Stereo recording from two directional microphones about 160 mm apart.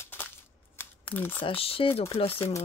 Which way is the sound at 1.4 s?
35° left (ahead or behind).